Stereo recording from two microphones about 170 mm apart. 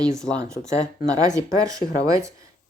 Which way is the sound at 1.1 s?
20° right (ahead or behind).